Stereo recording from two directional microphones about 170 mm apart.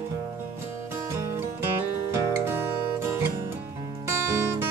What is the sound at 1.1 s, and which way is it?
Music, 15° right (ahead or behind).